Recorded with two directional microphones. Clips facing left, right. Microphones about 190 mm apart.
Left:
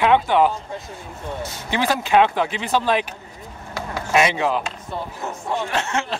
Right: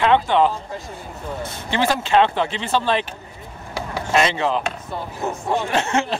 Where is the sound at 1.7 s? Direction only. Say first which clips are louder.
Even; 15° left (ahead or behind).